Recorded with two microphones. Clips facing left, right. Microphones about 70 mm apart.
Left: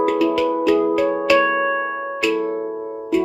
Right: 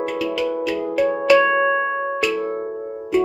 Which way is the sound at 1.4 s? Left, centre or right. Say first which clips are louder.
Right 1 dB; centre.